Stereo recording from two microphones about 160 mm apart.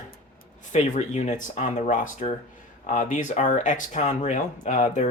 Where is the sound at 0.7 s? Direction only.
45° left (ahead or behind).